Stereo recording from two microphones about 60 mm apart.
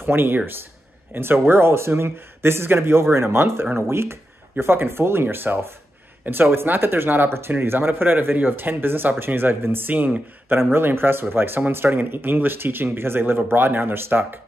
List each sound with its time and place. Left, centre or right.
0.0 s speech: right
10.6 s speech: right